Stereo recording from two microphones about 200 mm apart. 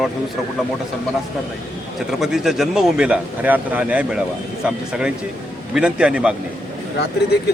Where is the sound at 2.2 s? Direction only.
Centre (ahead or behind).